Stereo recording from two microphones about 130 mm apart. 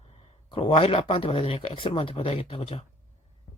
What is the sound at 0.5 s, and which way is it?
Speech, 45° left (ahead or behind).